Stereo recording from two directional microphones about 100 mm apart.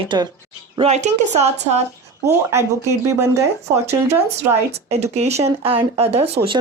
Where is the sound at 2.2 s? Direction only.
25° right (ahead or behind).